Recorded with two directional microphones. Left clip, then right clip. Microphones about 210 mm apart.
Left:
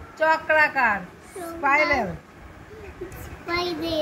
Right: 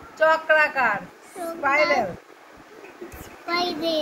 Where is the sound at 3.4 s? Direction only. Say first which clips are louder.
Right 2 dB; 25° right (ahead or behind).